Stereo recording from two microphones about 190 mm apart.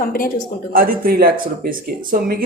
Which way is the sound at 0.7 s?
50° right (ahead or behind).